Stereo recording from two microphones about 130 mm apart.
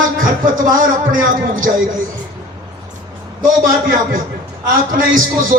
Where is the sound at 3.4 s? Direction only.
90° right.